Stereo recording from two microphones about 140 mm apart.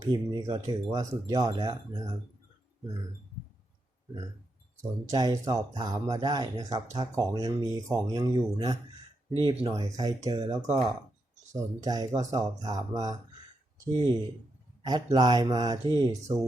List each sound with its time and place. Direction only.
0.0 s speech: 30° right (ahead or behind)
4.8 s speech: 25° right (ahead or behind)
14.8 s speech: 30° right (ahead or behind)